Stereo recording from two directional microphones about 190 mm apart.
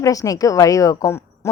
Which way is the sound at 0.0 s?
20° left (ahead or behind).